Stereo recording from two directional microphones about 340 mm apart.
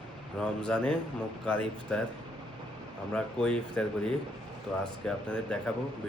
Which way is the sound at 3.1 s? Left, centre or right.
Centre.